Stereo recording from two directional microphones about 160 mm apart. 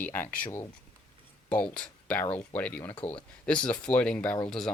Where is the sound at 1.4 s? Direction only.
5° left (ahead or behind).